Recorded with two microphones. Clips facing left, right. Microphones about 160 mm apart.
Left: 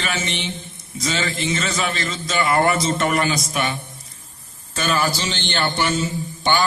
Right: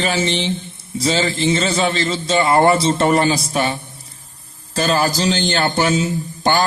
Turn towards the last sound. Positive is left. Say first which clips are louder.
# right 3 dB
turn(degrees=-40)  # may be behind; listen again after turning